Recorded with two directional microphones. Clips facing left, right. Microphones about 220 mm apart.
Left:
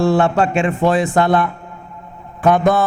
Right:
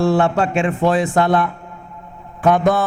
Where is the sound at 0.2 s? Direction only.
15° left (ahead or behind).